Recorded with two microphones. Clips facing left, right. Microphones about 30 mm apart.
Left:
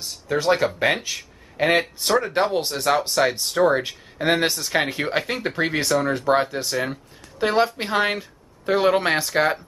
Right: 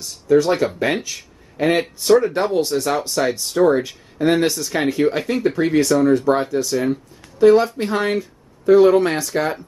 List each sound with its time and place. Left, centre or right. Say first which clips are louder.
0.0 s speech: right 7 dB; centre